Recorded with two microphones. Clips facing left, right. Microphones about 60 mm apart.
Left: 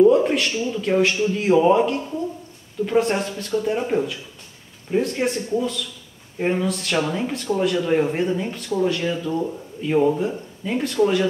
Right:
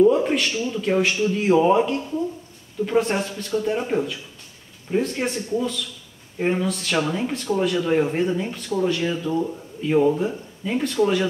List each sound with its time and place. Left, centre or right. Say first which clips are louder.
0.1 s a sound: left 2 dB; centre
0.5 s speech: left 1 dB; centre
0.7 s speech: left 2 dB; centre